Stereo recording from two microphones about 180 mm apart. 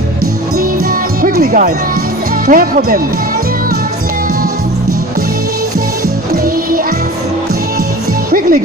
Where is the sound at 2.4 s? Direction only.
50° right (ahead or behind).